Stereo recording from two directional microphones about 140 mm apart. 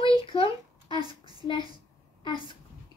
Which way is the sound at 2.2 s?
35° left (ahead or behind).